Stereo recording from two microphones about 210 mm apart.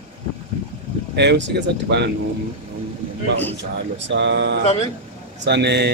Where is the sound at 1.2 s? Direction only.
55° right (ahead or behind).